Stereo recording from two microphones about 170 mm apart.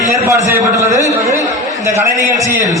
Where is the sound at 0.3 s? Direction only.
15° right (ahead or behind).